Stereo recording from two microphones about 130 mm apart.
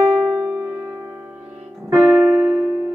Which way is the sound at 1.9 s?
10° right (ahead or behind).